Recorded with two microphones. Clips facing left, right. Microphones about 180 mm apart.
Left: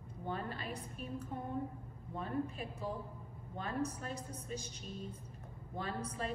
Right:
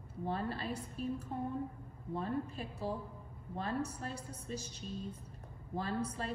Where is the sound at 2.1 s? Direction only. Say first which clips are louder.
Right 1 dB; 35° right (ahead or behind).